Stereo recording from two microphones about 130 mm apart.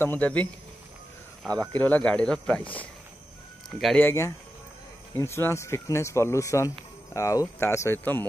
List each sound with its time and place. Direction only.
0.0 s speech: 15° left (ahead or behind)
1.5 s speech: 10° left (ahead or behind)
4.0 s speech: 20° left (ahead or behind)